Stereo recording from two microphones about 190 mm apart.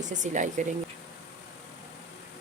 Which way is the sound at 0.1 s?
40° right (ahead or behind).